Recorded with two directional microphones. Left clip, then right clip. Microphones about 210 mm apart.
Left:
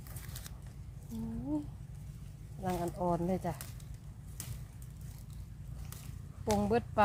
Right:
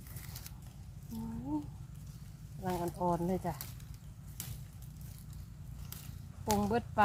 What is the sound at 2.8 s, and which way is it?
Speech, 40° left (ahead or behind).